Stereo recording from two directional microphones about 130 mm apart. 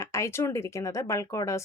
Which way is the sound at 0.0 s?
20° left (ahead or behind).